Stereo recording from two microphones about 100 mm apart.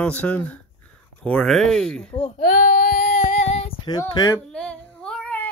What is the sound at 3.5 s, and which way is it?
Female singing, 90° left.